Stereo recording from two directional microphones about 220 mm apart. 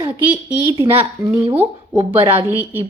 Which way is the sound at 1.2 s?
Centre (ahead or behind).